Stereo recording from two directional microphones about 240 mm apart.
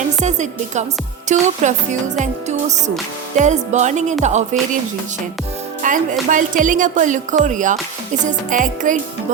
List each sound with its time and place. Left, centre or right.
0.2 s speech: right
5.8 s speech: right